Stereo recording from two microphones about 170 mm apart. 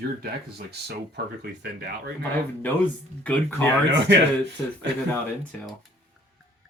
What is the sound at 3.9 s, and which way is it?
Speech, 90° right.